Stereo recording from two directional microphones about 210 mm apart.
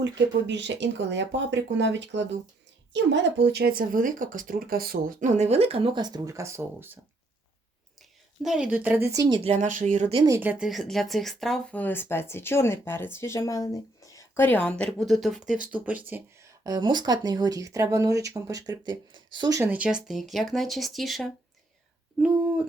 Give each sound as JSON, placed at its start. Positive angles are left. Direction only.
{"t": 0.0, "sound": "speech", "side_deg": -60}
{"t": 8.4, "sound": "speech", "side_deg": 0}
{"t": 9.4, "sound": "speech", "side_deg": -30}
{"t": 10.2, "sound": "speech", "side_deg": -10}